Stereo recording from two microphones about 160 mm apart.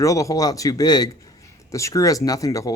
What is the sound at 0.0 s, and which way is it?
Speech, 20° left (ahead or behind).